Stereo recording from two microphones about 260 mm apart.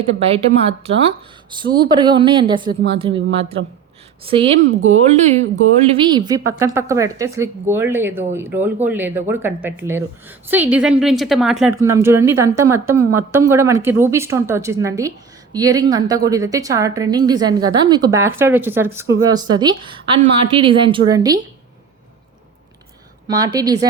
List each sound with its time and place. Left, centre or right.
0.0 s speech: right
4.3 s speech: right
4.6 s speech: right
6.1 s speech: centre
23.3 s speech: centre